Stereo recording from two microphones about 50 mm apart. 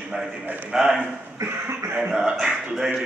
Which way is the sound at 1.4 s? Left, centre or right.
Right.